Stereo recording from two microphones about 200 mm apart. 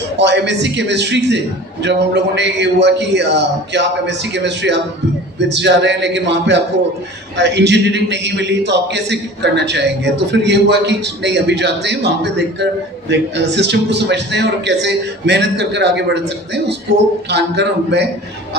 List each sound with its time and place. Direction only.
0.2 s a man's voice: 60° right (ahead or behind)
17.2 s a man's voice: 60° right (ahead or behind)